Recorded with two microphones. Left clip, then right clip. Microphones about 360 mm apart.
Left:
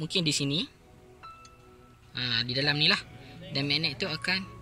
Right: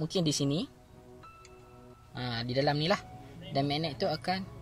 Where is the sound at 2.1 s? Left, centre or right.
Centre.